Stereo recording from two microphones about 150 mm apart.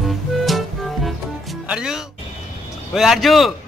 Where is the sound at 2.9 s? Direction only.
Centre (ahead or behind).